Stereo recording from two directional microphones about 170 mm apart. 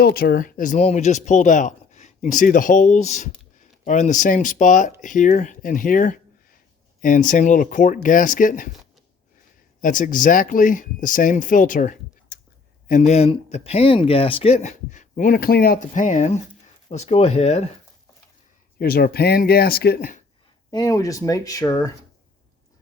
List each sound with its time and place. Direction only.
0.0 s speech: 65° left (ahead or behind)
9.8 s speech: 50° left (ahead or behind)
12.3 s a sound: 90° left
12.9 s speech: 40° left (ahead or behind)
18.8 s speech: 65° left (ahead or behind)
20.7 s speech: 20° left (ahead or behind)